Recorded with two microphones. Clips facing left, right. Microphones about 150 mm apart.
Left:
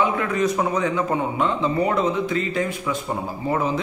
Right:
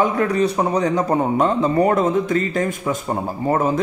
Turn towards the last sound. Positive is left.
turn(degrees=-45)  # may be behind; listen again after turning